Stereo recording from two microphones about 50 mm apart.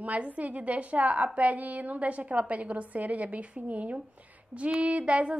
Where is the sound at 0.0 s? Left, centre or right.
Right.